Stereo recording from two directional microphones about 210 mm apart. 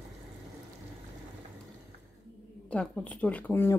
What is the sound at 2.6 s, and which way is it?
A woman's voice, 5° left (ahead or behind).